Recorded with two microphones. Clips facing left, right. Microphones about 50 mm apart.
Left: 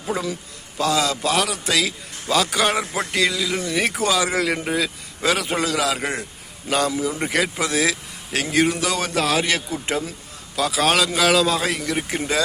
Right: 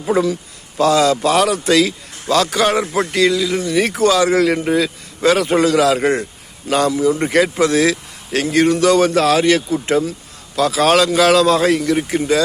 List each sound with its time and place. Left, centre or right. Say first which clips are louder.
0.8 s a man's voice: right 7 dB; centre